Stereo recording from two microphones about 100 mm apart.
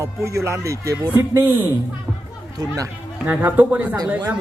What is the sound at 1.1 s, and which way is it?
Speech, 20° right (ahead or behind).